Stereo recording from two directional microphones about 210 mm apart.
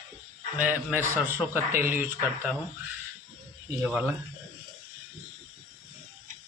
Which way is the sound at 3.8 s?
5° right (ahead or behind).